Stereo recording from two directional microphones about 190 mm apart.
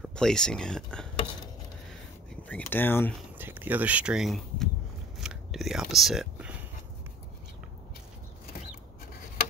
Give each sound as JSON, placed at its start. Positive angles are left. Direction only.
{"t": 0.0, "sound": "speech", "side_deg": 5}
{"t": 2.4, "sound": "speech", "side_deg": 10}
{"t": 3.3, "sound": "speech", "side_deg": -10}
{"t": 5.2, "sound": "scissors", "side_deg": 0}